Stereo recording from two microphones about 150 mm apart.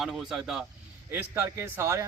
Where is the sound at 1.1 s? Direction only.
15° right (ahead or behind).